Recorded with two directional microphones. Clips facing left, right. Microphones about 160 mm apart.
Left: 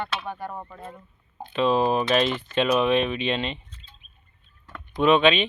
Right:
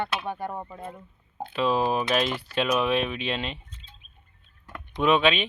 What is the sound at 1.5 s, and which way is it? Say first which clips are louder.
Speech: left 3 dB; 5° right (ahead or behind).